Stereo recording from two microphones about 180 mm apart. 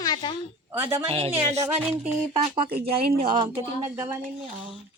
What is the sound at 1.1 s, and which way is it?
Speech, 35° right (ahead or behind).